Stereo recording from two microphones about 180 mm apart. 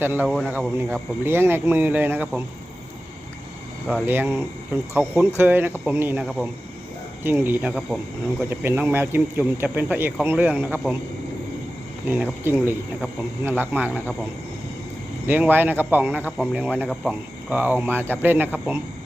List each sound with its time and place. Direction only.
0.0 s speech: 10° right (ahead or behind)
0.3 s speech: centre (ahead or behind)
0.5 s speech: 10° right (ahead or behind)
4.0 s speech: 10° right (ahead or behind)
7.3 s speech: 10° right (ahead or behind)
12.0 s speech: 10° right (ahead or behind)
15.3 s speech: 10° right (ahead or behind)